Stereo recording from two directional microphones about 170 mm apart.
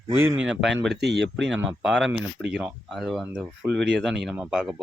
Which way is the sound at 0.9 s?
80° right.